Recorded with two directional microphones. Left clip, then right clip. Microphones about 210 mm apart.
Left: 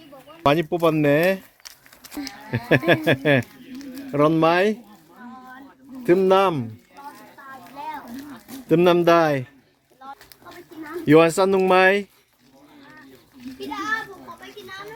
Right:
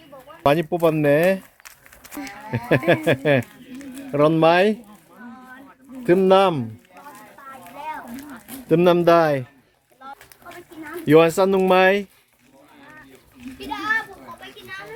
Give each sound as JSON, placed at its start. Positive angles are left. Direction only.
{"t": 0.4, "sound": "speech", "side_deg": 0}
{"t": 6.1, "sound": "speech", "side_deg": -5}
{"t": 8.7, "sound": "speech", "side_deg": 0}
{"t": 11.0, "sound": "speech", "side_deg": 0}
{"t": 13.6, "sound": "children playing", "side_deg": -40}